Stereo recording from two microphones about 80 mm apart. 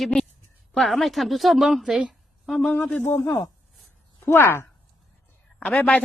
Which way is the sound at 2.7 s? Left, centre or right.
Centre.